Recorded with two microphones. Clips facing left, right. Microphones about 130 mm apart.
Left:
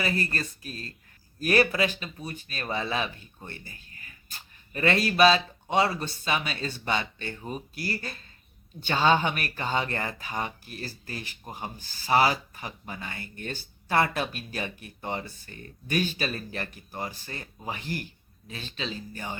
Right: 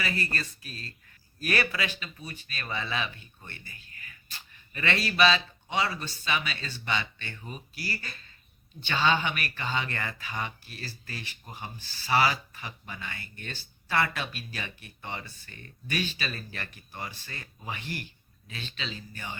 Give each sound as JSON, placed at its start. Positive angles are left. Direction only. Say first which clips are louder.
{"t": 0.3, "sound": "a man's voice", "louder": "left 3 dB", "side_deg": 40}